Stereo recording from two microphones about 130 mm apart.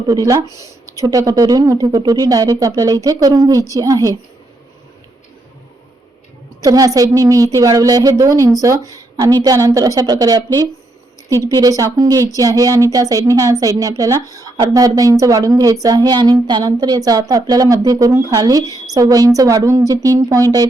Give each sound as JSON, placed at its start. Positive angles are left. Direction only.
{"t": 0.1, "sound": "a woman's voice", "side_deg": -30}
{"t": 6.6, "sound": "a woman's voice", "side_deg": -30}